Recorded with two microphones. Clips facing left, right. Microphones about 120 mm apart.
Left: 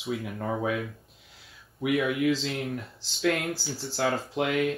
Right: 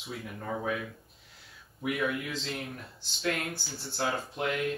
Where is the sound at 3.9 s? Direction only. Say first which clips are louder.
Left 5 dB; 90° left.